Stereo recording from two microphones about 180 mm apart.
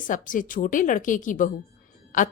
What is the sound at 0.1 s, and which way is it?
A woman's voice, 50° left (ahead or behind).